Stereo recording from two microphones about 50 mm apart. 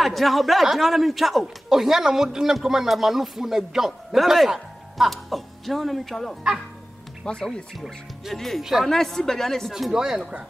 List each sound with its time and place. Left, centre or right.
0.0 s a man's voice: centre
7.2 s speech: centre
7.7 s a man's voice: centre
9.7 s speech: centre